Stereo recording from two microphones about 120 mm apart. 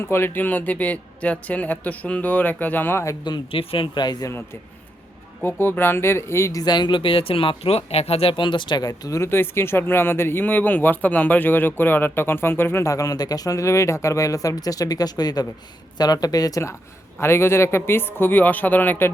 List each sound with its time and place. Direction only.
0.1 s speech: 15° left (ahead or behind)
3.2 s a man's voice: 45° left (ahead or behind); by 19.1 s 15° left (ahead or behind)